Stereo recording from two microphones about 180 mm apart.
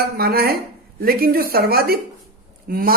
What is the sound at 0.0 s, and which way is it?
A man's voice, 55° right (ahead or behind).